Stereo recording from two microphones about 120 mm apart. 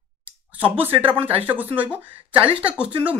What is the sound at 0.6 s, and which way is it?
Speech, 15° right (ahead or behind).